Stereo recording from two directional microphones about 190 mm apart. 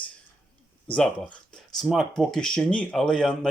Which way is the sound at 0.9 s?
5° left (ahead or behind).